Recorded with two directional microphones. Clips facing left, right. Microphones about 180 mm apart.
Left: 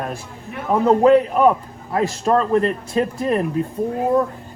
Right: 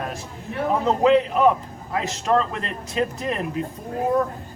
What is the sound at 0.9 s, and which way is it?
Speech, 45° left (ahead or behind).